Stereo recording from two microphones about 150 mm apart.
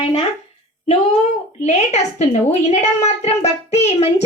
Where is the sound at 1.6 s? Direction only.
50° left (ahead or behind).